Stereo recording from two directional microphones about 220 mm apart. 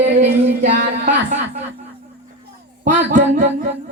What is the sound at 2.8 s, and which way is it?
Speech, 35° right (ahead or behind).